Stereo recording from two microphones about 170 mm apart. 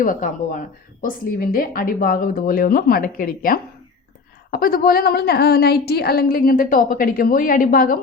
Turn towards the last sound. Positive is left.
turn(degrees=55)  # may be behind; listen again after turning